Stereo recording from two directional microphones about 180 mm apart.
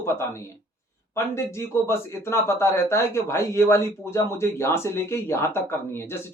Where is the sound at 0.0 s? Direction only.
15° left (ahead or behind).